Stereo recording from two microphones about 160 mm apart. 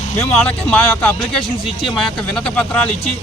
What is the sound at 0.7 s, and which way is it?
Speech, 5° left (ahead or behind).